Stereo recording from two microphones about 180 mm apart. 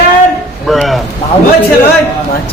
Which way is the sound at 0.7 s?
Centre (ahead or behind).